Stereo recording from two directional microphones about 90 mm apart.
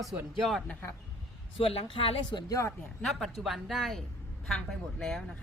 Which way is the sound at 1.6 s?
90° left.